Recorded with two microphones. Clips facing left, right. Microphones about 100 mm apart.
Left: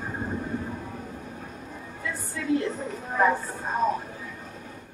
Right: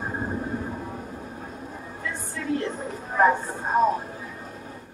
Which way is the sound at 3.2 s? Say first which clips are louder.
Right 3 dB; 35° right (ahead or behind).